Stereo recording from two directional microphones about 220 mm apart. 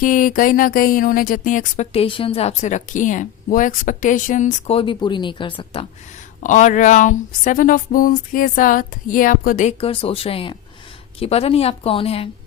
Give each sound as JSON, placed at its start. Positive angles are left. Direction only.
{"t": 0.0, "sound": "speech", "side_deg": 40}
{"t": 6.4, "sound": "a woman's voice", "side_deg": 35}